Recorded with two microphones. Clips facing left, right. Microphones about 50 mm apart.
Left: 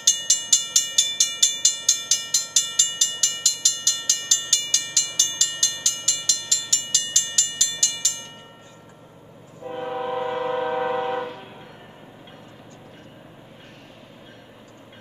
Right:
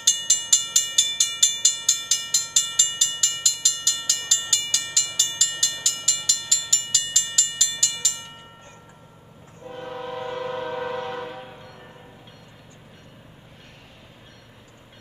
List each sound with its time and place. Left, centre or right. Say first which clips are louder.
0.0 s vehicle: even; centre
9.6 s train: left 5 dB; centre